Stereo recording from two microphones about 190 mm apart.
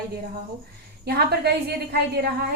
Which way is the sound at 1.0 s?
55° right (ahead or behind).